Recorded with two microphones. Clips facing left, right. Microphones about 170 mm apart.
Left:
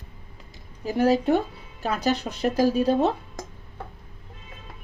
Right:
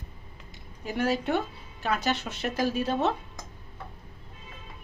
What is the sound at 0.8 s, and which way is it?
Speech, 35° left (ahead or behind).